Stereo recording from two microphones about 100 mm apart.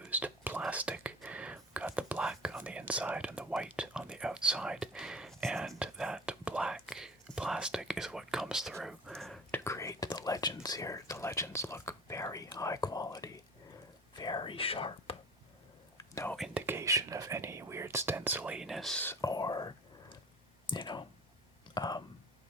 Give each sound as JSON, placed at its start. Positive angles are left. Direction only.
{"t": 0.0, "sound": "whispering", "side_deg": -15}
{"t": 0.7, "sound": "speech", "side_deg": -15}
{"t": 9.6, "sound": "speech", "side_deg": 30}
{"t": 14.2, "sound": "speech", "side_deg": 50}
{"t": 16.6, "sound": "speech", "side_deg": -20}
{"t": 16.8, "sound": "speech", "side_deg": -35}
{"t": 18.5, "sound": "speech", "side_deg": -5}
{"t": 19.2, "sound": "whispering", "side_deg": 40}
{"t": 20.7, "sound": "speech", "side_deg": 50}